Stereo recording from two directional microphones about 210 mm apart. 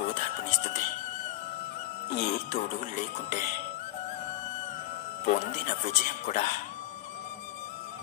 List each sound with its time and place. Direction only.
0.0 s music: 35° left (ahead or behind)
2.0 s music: 35° left (ahead or behind)
5.2 s speech: 35° left (ahead or behind)